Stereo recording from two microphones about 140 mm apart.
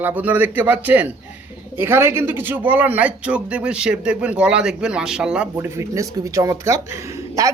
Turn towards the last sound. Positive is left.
turn(degrees=-20)  # may be behind; listen again after turning